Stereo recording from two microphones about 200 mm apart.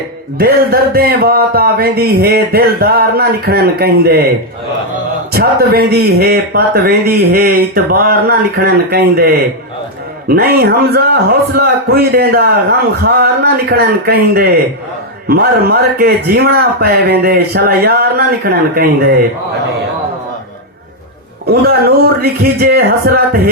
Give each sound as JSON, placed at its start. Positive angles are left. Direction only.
{"t": 0.3, "sound": "speech", "side_deg": -50}
{"t": 5.3, "sound": "speech", "side_deg": -50}
{"t": 10.2, "sound": "speech", "side_deg": -50}
{"t": 21.4, "sound": "speech", "side_deg": -50}